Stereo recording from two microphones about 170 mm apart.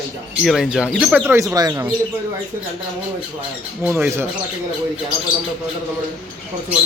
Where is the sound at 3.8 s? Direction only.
10° right (ahead or behind).